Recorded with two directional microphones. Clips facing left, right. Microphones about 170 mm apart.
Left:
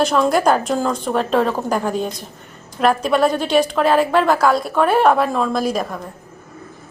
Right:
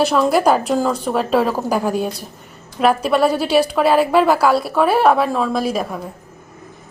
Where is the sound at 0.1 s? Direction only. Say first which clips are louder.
Right 1 dB; 5° right (ahead or behind).